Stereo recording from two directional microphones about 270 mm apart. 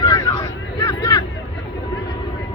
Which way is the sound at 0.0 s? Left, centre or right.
Centre.